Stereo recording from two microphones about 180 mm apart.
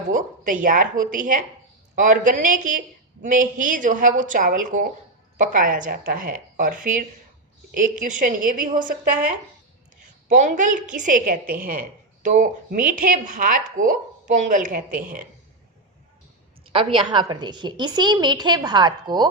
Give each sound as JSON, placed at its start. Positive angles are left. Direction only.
{"t": 0.1, "sound": "a woman's voice", "side_deg": -45}
{"t": 10.2, "sound": "a woman's voice", "side_deg": -45}
{"t": 16.6, "sound": "a woman's voice", "side_deg": -30}